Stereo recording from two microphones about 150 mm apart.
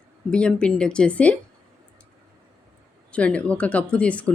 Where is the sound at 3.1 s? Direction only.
10° left (ahead or behind).